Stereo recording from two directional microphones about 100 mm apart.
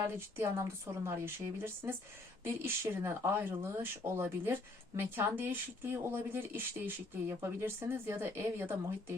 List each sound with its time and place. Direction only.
0.0 s speech: 25° right (ahead or behind)